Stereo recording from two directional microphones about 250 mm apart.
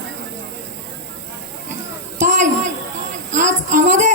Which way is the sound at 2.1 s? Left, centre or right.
Right.